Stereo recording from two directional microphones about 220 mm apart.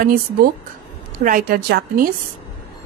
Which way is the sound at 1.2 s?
40° right (ahead or behind).